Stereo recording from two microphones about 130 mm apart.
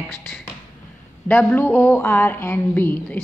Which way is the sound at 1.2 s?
15° left (ahead or behind).